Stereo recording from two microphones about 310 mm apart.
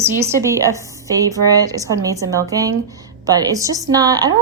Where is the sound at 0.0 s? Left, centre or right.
Centre.